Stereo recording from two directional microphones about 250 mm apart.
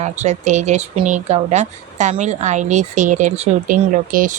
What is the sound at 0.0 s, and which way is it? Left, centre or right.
Speech, right.